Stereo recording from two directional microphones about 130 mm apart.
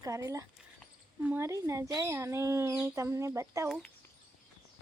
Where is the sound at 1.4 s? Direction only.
25° right (ahead or behind).